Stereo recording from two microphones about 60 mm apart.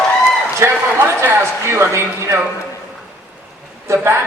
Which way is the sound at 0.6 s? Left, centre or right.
Right.